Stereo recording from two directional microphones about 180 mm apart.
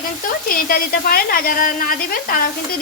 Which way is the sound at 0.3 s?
50° left (ahead or behind).